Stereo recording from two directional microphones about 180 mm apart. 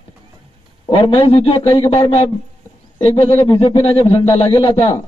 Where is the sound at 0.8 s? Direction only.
30° left (ahead or behind).